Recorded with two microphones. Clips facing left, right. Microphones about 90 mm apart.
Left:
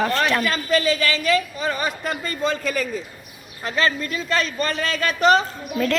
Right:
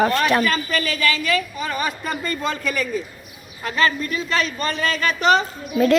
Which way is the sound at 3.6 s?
35° left (ahead or behind).